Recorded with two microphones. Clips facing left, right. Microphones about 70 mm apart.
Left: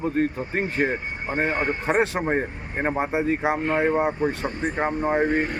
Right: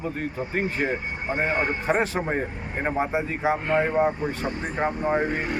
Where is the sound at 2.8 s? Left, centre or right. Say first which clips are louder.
Left 2 dB; left.